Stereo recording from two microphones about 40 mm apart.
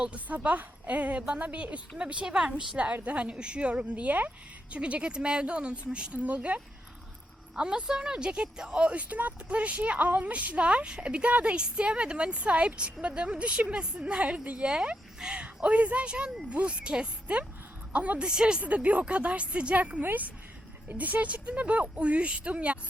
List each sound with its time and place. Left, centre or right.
0.3 s a woman's voice: right
2.2 s a woman's voice: centre
2.7 s a woman's voice: right
6.2 s speech: right
7.5 s a woman's voice: right
15.2 s a sound: right
15.7 s a woman's voice: right
17.9 s speech: right
18.3 s a woman's voice: right
18.6 s speech: right